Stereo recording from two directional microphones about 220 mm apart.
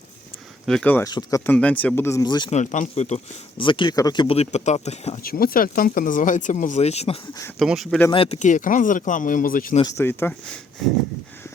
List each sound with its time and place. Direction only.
0.6 s speech: 5° left (ahead or behind); by 2.6 s 20° left (ahead or behind)
2.6 s speech: 35° left (ahead or behind)
5.2 s speech: 45° left (ahead or behind)
7.6 s speech: centre (ahead or behind)
8.1 s speech: 25° left (ahead or behind)
10.0 s speech: 10° left (ahead or behind)